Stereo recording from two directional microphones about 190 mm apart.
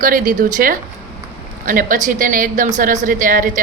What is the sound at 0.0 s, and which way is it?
A woman's voice, 45° right (ahead or behind).